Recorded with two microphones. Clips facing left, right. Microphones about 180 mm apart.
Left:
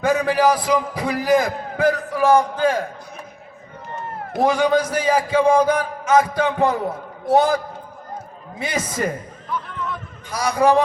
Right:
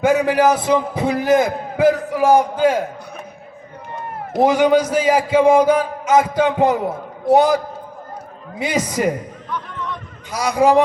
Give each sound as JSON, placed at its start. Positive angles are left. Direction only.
{"t": 0.0, "sound": "a man's voice", "side_deg": -20}
{"t": 4.4, "sound": "a man's voice", "side_deg": -20}
{"t": 9.5, "sound": "a sound", "side_deg": 5}
{"t": 10.3, "sound": "a man's voice", "side_deg": -20}